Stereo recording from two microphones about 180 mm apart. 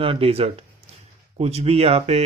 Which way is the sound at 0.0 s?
30° right (ahead or behind).